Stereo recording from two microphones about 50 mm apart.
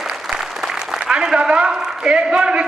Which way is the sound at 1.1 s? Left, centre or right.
Centre.